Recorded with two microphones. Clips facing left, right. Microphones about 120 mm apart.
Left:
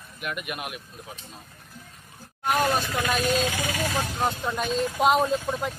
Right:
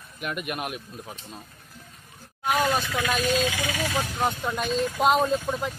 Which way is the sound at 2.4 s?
45° left (ahead or behind).